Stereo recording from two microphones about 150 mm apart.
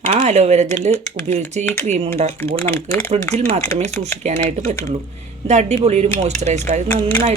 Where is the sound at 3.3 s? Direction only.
50° right (ahead or behind).